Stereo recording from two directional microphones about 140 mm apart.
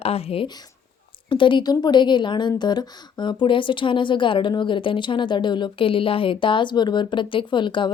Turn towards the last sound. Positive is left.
turn(degrees=35)  # may be behind; listen again after turning